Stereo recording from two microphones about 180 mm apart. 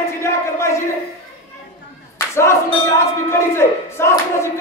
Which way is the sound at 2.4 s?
15° left (ahead or behind).